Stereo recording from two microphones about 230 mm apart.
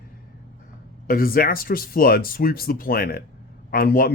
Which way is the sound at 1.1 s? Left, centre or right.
Left.